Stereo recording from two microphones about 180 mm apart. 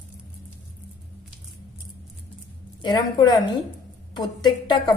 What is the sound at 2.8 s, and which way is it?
A woman's voice, 25° left (ahead or behind).